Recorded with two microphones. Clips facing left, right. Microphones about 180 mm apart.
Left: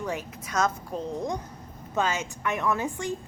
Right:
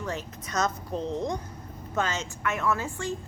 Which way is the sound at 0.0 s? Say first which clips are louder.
Left 2 dB; 10° left (ahead or behind).